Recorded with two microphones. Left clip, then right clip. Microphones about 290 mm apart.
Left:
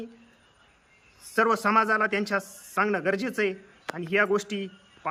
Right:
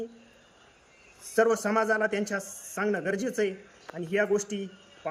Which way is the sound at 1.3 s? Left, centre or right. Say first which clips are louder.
Left 2 dB; centre.